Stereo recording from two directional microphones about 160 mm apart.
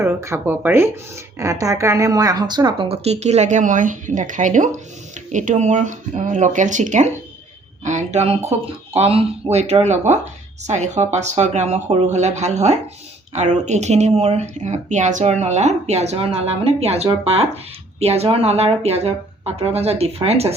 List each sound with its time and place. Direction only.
0.0 s speech: 20° right (ahead or behind); by 20.5 s 40° right (ahead or behind)